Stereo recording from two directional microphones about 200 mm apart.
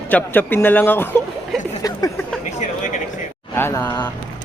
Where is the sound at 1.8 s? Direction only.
15° left (ahead or behind).